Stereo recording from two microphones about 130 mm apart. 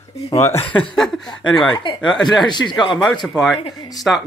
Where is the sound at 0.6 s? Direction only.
40° left (ahead or behind).